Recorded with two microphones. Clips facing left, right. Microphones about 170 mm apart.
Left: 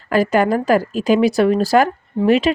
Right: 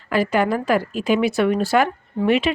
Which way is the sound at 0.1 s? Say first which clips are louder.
Left 4 dB; 45° left (ahead or behind).